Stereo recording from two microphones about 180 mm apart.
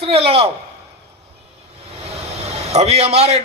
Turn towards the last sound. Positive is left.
turn(degrees=-35)  # may be behind; listen again after turning